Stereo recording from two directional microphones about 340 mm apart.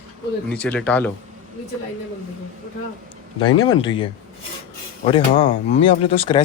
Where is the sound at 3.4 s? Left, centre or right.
Centre.